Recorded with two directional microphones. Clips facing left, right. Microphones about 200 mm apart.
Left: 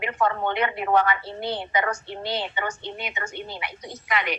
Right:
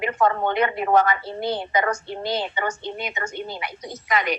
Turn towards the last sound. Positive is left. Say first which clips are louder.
# right 3 dB
turn(degrees=-40)  # may be behind; listen again after turning